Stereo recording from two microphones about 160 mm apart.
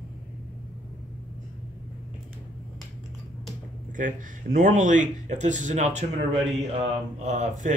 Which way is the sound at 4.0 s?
55° right (ahead or behind).